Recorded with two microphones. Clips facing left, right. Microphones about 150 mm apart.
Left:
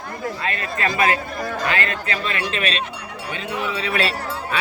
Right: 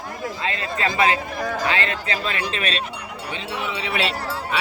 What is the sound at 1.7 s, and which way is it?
Speech, 25° right (ahead or behind).